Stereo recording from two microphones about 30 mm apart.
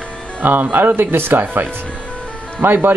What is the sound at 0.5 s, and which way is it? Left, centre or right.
Speech, right.